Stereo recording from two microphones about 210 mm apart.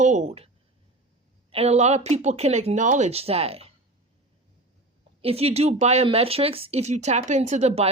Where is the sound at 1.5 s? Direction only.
30° right (ahead or behind).